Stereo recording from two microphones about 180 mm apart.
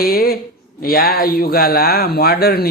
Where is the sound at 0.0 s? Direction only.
55° left (ahead or behind).